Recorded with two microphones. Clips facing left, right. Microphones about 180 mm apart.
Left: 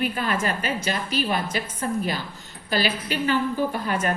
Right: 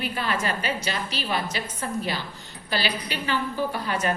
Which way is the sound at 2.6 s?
45° left (ahead or behind).